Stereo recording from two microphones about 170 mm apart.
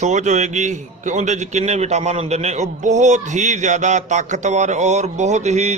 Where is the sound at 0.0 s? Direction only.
45° right (ahead or behind).